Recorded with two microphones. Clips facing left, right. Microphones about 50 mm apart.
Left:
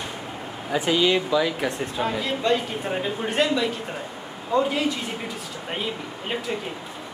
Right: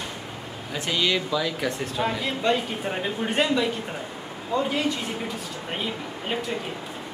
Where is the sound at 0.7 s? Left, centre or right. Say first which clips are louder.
Left 4 dB; centre.